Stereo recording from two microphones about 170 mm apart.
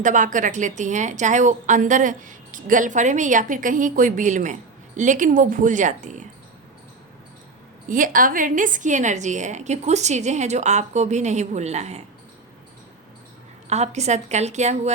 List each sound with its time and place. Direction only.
0.0 s a woman's voice: 50° right (ahead or behind)
7.9 s a woman's voice: 50° right (ahead or behind)
13.7 s a woman's voice: 40° right (ahead or behind)